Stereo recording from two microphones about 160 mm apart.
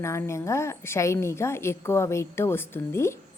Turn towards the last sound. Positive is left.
turn(degrees=15)  # may be behind; listen again after turning